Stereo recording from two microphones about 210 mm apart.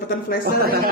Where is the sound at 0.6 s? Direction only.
45° right (ahead or behind).